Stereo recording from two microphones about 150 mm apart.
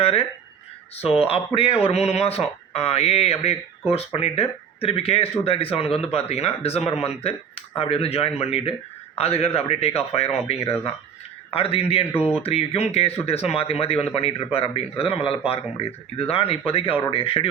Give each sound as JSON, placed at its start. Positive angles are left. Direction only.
{"t": 0.0, "sound": "speech", "side_deg": 40}